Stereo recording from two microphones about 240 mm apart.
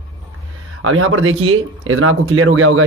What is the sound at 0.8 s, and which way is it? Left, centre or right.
Speech, right.